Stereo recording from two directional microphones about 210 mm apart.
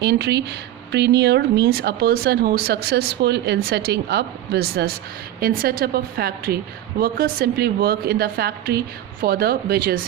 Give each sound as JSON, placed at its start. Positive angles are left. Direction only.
{"t": 0.0, "sound": "speech", "side_deg": -50}